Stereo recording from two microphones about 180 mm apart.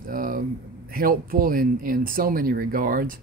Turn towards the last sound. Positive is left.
turn(degrees=-50)  # may be behind; listen again after turning